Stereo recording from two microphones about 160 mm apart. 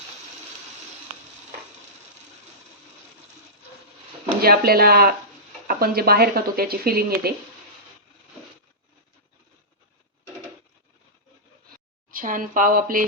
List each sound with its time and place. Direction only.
4.4 s speech: 70° right (ahead or behind)
12.1 s speech: 60° right (ahead or behind)